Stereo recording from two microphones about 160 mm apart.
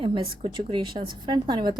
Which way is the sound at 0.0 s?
30° right (ahead or behind).